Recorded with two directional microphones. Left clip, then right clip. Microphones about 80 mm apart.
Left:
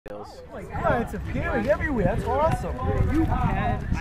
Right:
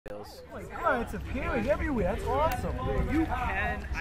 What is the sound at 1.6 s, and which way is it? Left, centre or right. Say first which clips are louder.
Speech: left 5 dB; centre.